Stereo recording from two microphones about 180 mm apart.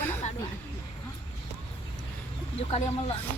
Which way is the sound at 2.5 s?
35° left (ahead or behind).